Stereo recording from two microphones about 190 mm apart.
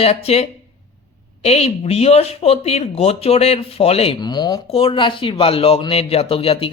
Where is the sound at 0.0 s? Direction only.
30° left (ahead or behind).